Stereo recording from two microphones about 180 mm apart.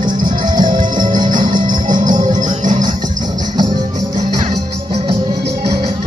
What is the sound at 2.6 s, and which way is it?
Music, 45° right (ahead or behind).